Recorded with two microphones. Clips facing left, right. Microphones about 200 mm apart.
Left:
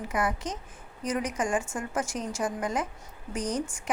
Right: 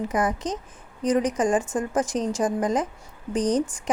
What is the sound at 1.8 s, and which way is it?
A woman's voice, 35° right (ahead or behind).